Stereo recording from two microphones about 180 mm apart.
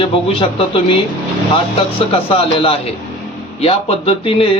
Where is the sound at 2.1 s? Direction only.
30° left (ahead or behind).